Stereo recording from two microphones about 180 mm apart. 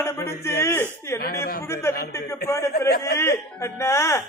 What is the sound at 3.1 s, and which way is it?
A man's voice, 15° left (ahead or behind).